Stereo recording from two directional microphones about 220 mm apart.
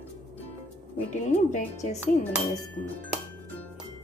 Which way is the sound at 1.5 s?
30° left (ahead or behind).